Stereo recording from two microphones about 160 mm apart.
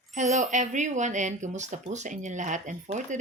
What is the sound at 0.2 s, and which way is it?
Speech, 50° right (ahead or behind).